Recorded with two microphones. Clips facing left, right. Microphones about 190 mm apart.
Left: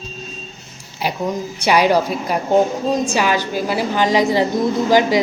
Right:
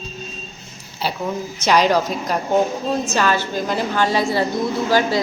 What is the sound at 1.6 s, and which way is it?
A woman's voice, 10° left (ahead or behind).